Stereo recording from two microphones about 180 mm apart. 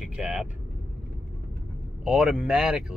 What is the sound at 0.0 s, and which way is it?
Vehicle, 5° right (ahead or behind).